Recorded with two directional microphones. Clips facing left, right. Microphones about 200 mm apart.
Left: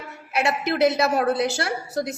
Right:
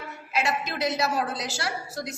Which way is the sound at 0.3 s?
65° left (ahead or behind).